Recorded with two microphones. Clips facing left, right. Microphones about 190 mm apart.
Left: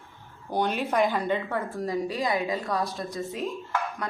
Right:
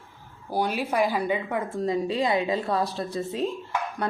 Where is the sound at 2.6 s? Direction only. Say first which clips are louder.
Right 3 dB; centre (ahead or behind).